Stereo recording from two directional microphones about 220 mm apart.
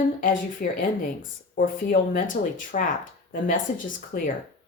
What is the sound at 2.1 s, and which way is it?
Speech, 35° left (ahead or behind).